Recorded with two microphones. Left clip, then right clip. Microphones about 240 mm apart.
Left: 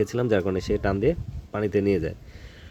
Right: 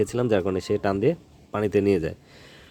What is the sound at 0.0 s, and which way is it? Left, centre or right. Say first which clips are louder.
Speech: right 1 dB; centre.